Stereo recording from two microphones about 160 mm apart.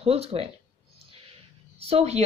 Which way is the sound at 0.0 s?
40° right (ahead or behind).